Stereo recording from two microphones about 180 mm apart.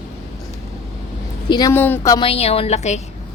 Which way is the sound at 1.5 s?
20° left (ahead or behind).